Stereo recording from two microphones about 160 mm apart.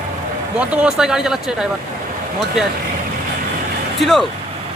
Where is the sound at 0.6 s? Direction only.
5° right (ahead or behind).